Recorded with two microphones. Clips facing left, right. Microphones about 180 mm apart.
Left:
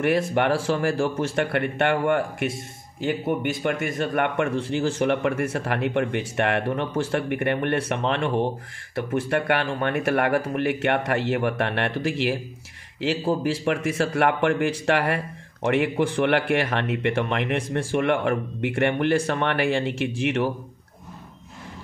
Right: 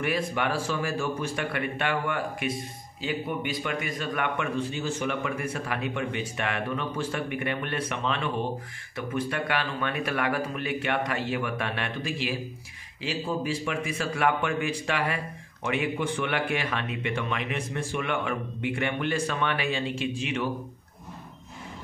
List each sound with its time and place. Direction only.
0.0 s speech: 60° left (ahead or behind)